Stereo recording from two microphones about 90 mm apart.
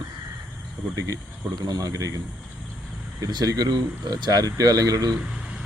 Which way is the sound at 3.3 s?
50° right (ahead or behind).